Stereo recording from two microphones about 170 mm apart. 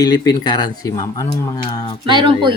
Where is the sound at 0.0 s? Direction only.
20° left (ahead or behind).